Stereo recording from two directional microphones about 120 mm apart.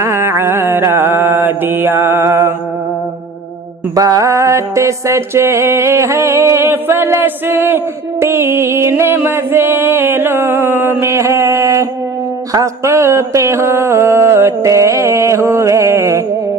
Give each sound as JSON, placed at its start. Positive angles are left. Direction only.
{"t": 0.0, "sound": "mantra", "side_deg": -20}
{"t": 3.9, "sound": "music", "side_deg": -30}